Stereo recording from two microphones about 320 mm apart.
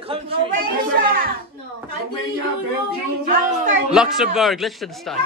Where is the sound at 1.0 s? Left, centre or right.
Right.